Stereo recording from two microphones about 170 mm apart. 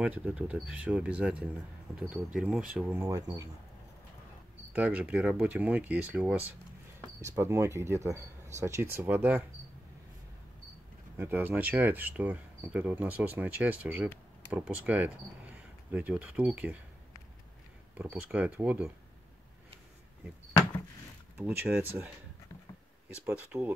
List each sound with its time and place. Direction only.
0.0 s speech: 10° right (ahead or behind)
4.7 s speech: 10° right (ahead or behind)
11.1 s speech: 10° right (ahead or behind)
17.9 s speech: 10° right (ahead or behind)
21.4 s speech: 10° right (ahead or behind)